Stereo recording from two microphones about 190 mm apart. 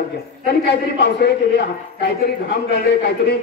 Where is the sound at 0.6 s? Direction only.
60° left (ahead or behind).